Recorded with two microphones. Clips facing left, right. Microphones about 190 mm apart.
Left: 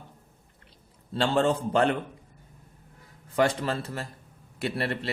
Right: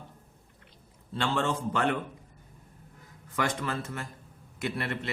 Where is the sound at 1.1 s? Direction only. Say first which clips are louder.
Left 5 dB; 35° left (ahead or behind).